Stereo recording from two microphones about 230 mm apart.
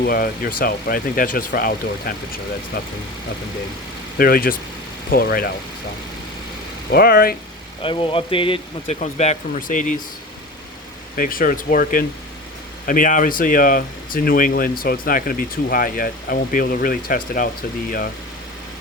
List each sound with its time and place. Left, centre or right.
0.0 s speech: left
4.2 s speech: left
6.9 s speech: left
7.8 s speech: left
11.2 s speech: left